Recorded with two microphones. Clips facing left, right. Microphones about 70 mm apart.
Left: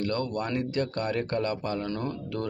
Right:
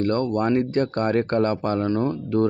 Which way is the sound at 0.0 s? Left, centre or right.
Right.